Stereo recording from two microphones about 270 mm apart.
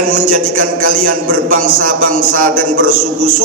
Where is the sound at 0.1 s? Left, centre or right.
Right.